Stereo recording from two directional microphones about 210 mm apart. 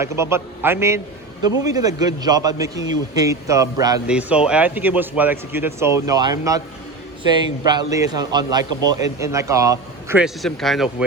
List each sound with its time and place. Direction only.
0.0 s a man's voice: 10° right (ahead or behind)
4.0 s a man's voice: 5° right (ahead or behind)
10.2 s speech: centre (ahead or behind)